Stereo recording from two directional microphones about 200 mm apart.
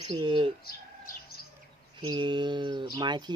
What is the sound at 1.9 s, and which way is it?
A man's voice, 25° right (ahead or behind).